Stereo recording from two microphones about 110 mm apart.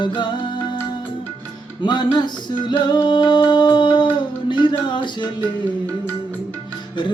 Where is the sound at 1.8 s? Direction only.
40° left (ahead or behind).